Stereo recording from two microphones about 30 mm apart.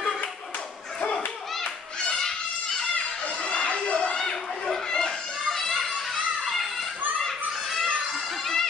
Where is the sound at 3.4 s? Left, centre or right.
Left.